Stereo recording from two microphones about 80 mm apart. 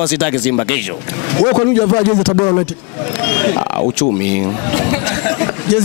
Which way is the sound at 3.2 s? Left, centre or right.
Centre.